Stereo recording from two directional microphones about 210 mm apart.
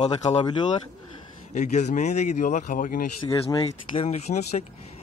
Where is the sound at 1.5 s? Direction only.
35° left (ahead or behind).